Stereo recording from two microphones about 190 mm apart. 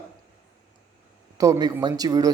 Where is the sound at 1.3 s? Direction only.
15° right (ahead or behind).